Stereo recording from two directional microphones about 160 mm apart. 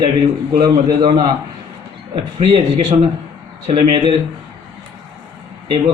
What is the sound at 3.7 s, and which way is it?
Speech, 35° right (ahead or behind).